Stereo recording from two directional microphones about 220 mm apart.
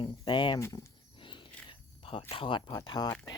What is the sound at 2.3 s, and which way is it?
Speech, 20° left (ahead or behind).